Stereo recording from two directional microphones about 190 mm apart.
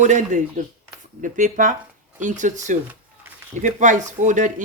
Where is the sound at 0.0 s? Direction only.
40° right (ahead or behind).